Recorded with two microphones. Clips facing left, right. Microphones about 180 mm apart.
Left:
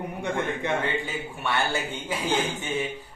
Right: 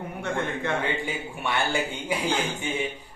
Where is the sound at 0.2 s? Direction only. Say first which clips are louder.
Even; 15° left (ahead or behind).